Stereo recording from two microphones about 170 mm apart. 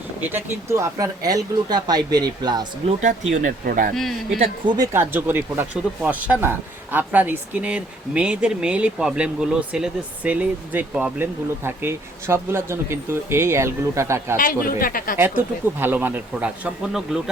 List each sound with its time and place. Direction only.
0.2 s speech: 10° right (ahead or behind)
3.3 s speech: 50° right (ahead or behind)
4.4 s speech: 25° right (ahead or behind)
4.9 s speech: 15° right (ahead or behind)
14.3 s speech: 55° left (ahead or behind)
15.2 s speech: 10° right (ahead or behind)